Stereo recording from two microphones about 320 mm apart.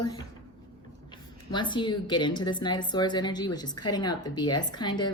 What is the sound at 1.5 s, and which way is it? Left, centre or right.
Speech, centre.